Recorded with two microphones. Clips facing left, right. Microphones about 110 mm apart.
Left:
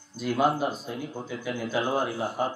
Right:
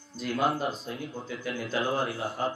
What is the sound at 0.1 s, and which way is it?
Speech, 5° left (ahead or behind).